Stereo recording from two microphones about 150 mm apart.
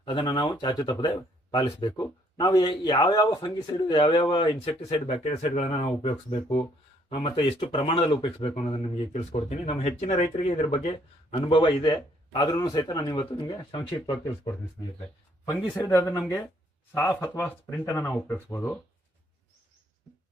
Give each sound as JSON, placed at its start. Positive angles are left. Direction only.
{"t": 0.0, "sound": "speech", "side_deg": 30}
{"t": 15.8, "sound": "speech", "side_deg": 15}